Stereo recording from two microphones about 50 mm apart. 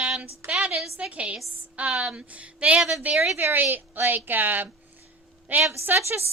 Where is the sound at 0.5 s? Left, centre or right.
Centre.